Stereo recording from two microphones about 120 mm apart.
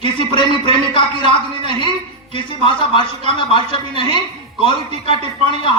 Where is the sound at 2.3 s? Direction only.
45° left (ahead or behind).